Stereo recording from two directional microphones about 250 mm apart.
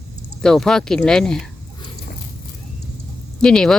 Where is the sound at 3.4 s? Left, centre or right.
Centre.